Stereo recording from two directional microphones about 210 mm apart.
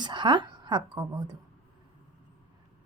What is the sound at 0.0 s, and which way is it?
A woman's voice, 20° right (ahead or behind).